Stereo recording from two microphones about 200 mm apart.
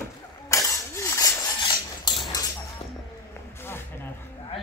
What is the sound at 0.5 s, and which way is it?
Cutlery, 15° left (ahead or behind).